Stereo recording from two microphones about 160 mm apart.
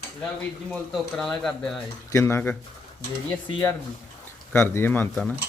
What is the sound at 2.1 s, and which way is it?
Speech, 15° left (ahead or behind).